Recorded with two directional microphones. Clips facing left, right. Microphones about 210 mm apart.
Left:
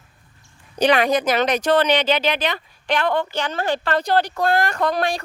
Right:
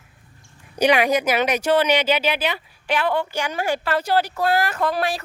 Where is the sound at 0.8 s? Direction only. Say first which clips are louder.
Even; 10° right (ahead or behind).